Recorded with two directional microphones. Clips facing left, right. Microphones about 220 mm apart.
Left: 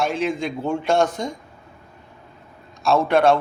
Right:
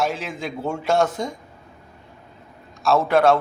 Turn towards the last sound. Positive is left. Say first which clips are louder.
# even
turn(degrees=0)  # may be behind; listen again after turning